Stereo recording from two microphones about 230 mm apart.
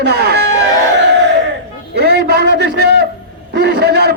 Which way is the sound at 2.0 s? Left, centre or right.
Right.